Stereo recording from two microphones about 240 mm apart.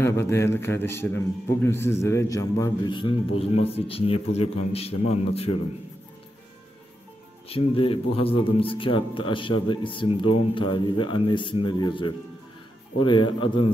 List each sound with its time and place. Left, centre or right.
0.0 s a man's voice: centre
7.4 s a man's voice: left